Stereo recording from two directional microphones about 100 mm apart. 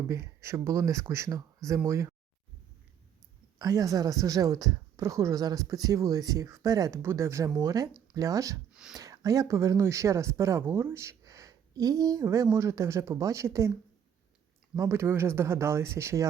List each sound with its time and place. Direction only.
0.1 s speech: 30° right (ahead or behind)
3.6 s speech: 35° right (ahead or behind)
7.0 s speech: 25° right (ahead or behind)
8.7 s a sound: 10° right (ahead or behind)
9.0 s speech: 35° right (ahead or behind)
14.8 s speech: 25° right (ahead or behind)